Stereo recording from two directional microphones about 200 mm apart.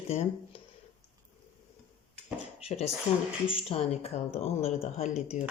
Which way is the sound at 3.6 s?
30° left (ahead or behind).